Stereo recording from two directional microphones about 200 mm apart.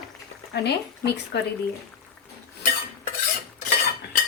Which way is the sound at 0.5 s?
55° left (ahead or behind).